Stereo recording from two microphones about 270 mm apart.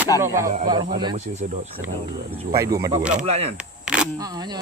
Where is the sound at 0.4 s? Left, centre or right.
Right.